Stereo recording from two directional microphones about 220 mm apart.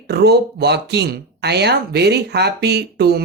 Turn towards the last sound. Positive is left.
turn(degrees=-45)  # may be behind; listen again after turning